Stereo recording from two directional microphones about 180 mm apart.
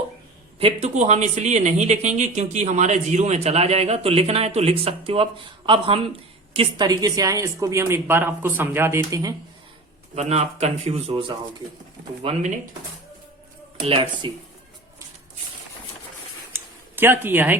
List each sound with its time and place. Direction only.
0.6 s a woman's voice: 40° right (ahead or behind); by 9.3 s 20° right (ahead or behind)
10.2 s speech: 35° right (ahead or behind)
13.8 s speech: 30° right (ahead or behind)
16.9 s a woman's voice: 10° right (ahead or behind)